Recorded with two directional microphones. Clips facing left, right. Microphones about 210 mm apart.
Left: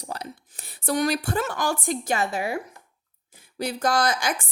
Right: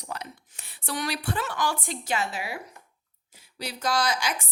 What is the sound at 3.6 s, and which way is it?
Speech, 50° left (ahead or behind).